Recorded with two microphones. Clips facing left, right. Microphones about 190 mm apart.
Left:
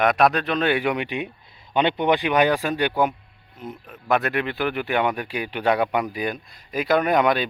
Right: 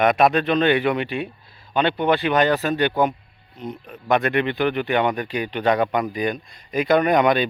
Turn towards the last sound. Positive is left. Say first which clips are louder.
# right 2 dB
turn(degrees=0)  # may be behind; listen again after turning